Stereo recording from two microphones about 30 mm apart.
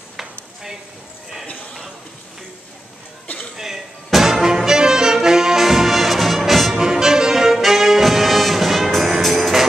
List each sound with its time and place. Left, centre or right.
3.5 s music: centre
5.6 s brass instrument: centre
6.8 s music: centre